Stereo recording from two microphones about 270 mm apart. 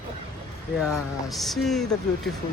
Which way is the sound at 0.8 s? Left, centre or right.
Centre.